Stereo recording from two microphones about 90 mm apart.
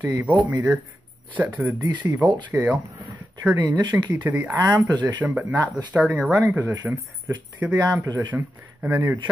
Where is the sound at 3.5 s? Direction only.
55° right (ahead or behind).